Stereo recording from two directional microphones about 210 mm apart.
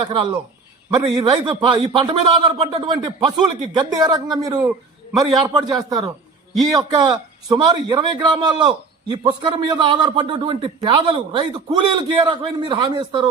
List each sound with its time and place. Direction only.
0.0 s a man's voice: 20° right (ahead or behind)